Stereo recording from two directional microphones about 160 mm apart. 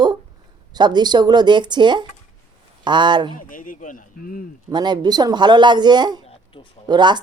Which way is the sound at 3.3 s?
55° left (ahead or behind).